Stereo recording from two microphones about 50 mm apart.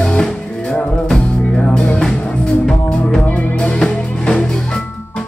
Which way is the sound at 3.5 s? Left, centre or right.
Left.